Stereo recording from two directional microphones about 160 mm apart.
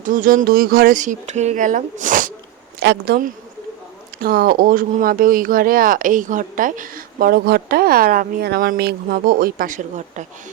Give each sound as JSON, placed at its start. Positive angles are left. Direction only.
{"t": 0.0, "sound": "speech", "side_deg": -55}
{"t": 2.8, "sound": "a woman's voice", "side_deg": -85}